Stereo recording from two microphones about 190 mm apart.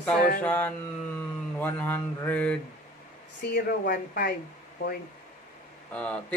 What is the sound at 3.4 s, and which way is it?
Speech, 55° left (ahead or behind).